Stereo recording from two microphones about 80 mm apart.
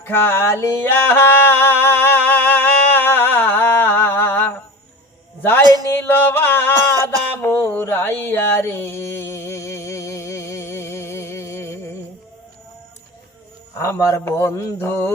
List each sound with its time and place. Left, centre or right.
0.0 s speech: left
0.9 s singing: left
5.4 s music: left
7.4 s a sound: left
13.7 s speech: left